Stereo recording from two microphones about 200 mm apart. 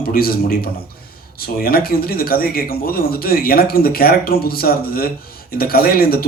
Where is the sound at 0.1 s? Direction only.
50° left (ahead or behind).